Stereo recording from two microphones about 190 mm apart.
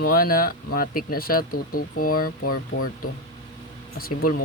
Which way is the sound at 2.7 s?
90° left.